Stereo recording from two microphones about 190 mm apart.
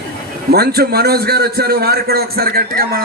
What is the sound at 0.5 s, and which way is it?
A man's voice, 55° right (ahead or behind).